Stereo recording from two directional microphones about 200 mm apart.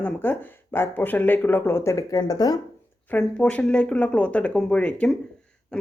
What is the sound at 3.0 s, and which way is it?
Speech, 5° left (ahead or behind).